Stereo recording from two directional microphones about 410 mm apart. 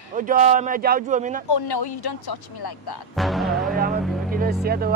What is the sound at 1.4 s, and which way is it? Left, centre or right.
Speech, left.